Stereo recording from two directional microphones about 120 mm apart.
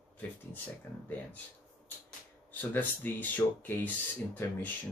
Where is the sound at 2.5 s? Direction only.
15° left (ahead or behind).